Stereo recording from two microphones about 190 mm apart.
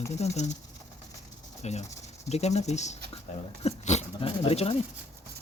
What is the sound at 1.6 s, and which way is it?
Speech, 35° left (ahead or behind).